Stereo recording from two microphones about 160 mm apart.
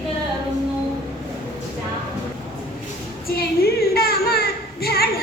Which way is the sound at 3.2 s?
70° left (ahead or behind).